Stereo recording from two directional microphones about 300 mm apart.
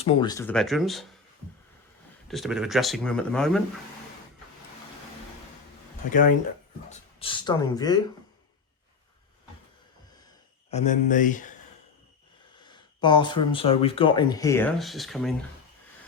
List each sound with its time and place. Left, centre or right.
0.0 s speech: centre
2.2 s speech: centre
6.1 s speech: left
10.7 s speech: left
12.5 s speech: centre